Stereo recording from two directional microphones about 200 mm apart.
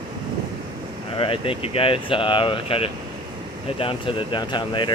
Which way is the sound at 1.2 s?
25° left (ahead or behind).